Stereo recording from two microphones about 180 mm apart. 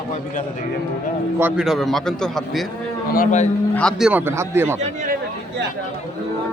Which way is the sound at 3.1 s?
45° left (ahead or behind).